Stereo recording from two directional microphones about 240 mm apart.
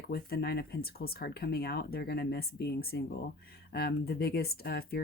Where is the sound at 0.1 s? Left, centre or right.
Left.